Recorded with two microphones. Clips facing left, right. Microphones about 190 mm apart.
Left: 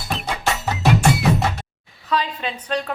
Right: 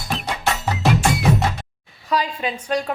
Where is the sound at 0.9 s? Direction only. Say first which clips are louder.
Left 1 dB; centre (ahead or behind).